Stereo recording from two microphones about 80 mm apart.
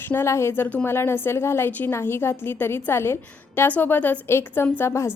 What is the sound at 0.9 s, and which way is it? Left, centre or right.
A woman's voice, left.